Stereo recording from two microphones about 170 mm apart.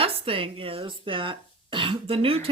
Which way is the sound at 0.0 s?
35° right (ahead or behind).